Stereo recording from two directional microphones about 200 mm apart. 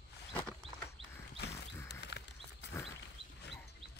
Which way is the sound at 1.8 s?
60° left (ahead or behind).